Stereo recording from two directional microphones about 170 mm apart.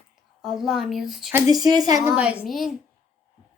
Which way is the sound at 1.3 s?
20° right (ahead or behind).